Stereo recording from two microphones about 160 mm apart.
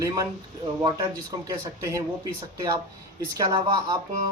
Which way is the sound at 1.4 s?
20° right (ahead or behind).